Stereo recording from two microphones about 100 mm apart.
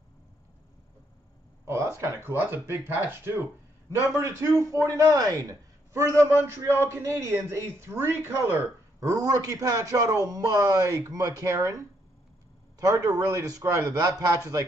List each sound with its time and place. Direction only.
1.7 s speech: 30° right (ahead or behind)